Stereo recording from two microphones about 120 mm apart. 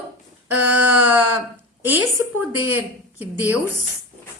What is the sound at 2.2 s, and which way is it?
A woman's voice, 20° right (ahead or behind).